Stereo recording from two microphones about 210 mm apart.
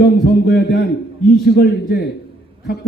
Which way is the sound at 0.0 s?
50° left (ahead or behind).